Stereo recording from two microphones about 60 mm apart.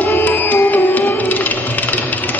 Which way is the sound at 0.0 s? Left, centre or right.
Left.